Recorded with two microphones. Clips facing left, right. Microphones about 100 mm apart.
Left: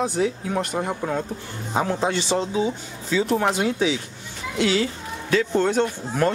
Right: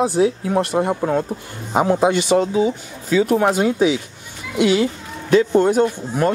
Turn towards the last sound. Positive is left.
turn(degrees=-10)  # may be behind; listen again after turning